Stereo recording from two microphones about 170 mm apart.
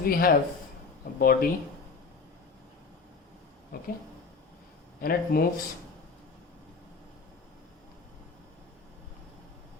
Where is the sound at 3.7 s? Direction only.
55° left (ahead or behind).